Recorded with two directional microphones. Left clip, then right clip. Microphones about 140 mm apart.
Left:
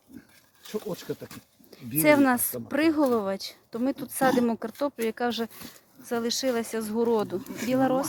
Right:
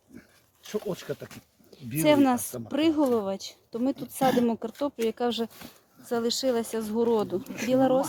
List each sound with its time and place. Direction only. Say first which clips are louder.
1.1 s speech: even; 40° right (ahead or behind)
2.0 s speech: left 1 dB; centre (ahead or behind)